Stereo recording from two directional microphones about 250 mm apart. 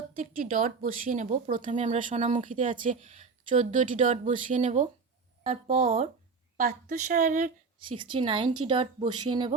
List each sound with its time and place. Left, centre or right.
0.2 s speech: right
6.6 s speech: right; by 9.6 s centre